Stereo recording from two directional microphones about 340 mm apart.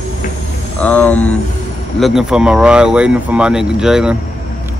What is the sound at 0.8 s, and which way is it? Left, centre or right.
Speech, centre.